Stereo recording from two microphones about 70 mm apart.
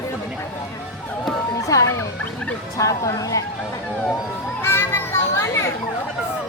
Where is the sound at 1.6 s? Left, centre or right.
Left.